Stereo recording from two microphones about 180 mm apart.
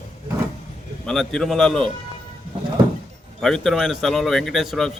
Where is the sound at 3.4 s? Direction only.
Centre (ahead or behind).